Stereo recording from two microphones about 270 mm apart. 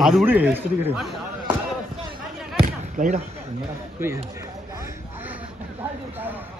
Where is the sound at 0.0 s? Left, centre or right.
Centre.